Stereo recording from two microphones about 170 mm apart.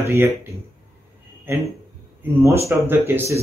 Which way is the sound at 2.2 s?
15° right (ahead or behind).